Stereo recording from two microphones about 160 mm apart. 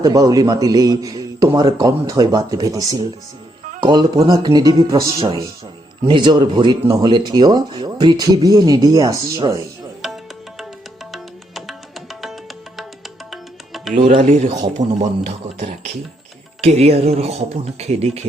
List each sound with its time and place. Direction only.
0.0 s speech: 25° right (ahead or behind)
11.1 s music: centre (ahead or behind)
13.9 s speech: 50° right (ahead or behind)
16.6 s speech: 40° right (ahead or behind)